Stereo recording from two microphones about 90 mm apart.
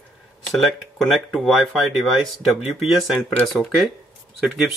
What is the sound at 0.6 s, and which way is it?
Speech, centre (ahead or behind).